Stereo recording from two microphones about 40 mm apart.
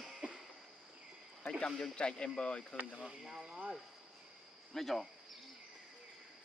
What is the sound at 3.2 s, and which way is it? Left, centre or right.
Speech, centre.